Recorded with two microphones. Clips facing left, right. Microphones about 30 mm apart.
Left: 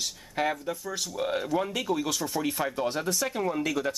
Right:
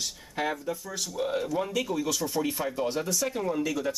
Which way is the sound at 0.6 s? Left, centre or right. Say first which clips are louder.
Left 1 dB; centre.